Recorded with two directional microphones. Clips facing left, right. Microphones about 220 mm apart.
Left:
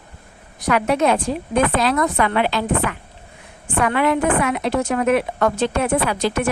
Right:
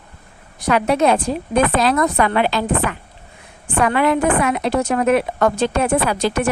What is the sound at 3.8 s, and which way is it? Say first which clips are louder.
A woman's voice: right 2 dB; 35° right (ahead or behind).